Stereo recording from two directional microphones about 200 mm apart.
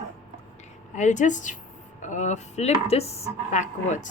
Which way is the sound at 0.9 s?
35° left (ahead or behind).